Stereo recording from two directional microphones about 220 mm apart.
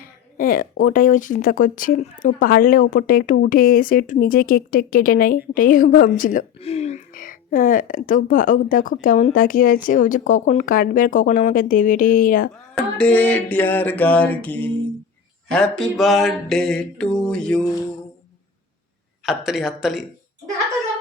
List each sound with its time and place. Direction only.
0.0 s speech: 40° left (ahead or behind)
12.7 s a sound: 5° left (ahead or behind)
15.5 s mantra: centre (ahead or behind)
19.2 s mantra: centre (ahead or behind)